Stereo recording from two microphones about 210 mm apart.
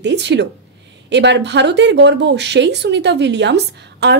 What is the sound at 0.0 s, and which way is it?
Speech, 55° right (ahead or behind).